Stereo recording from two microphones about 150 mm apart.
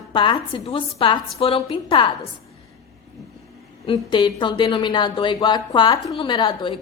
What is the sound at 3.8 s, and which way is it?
Speech, 35° left (ahead or behind).